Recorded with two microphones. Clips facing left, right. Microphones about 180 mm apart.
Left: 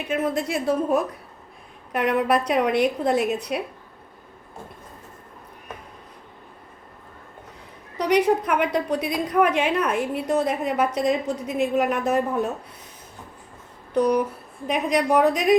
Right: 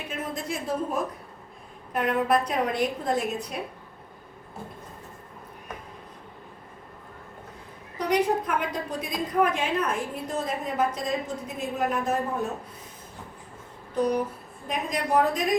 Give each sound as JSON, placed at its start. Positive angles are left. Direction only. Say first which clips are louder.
{"t": 0.1, "sound": "a woman's voice", "louder": "left 9 dB", "side_deg": 70}
{"t": 7.9, "sound": "a woman's voice", "louder": "left 5 dB", "side_deg": 75}
{"t": 13.9, "sound": "a sound", "louder": "left 5 dB", "side_deg": 70}
{"t": 14.7, "sound": "a woman's voice", "louder": "left 6 dB", "side_deg": 75}